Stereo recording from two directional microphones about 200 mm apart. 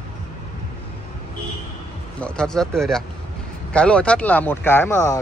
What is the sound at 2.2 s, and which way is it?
Speech, 5° left (ahead or behind).